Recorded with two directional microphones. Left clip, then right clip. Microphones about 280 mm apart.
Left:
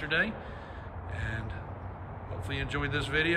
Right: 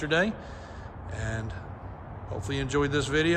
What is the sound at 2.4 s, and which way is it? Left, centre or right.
Speech, centre.